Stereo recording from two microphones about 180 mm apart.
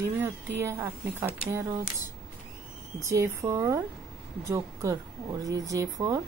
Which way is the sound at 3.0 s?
15° right (ahead or behind).